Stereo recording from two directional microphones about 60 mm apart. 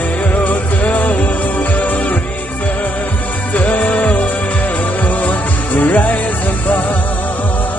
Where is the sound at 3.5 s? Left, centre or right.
Left.